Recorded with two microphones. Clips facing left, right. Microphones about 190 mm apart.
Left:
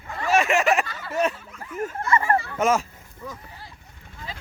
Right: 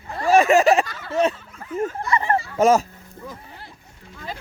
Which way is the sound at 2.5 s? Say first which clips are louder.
Right 7 dB; 35° right (ahead or behind).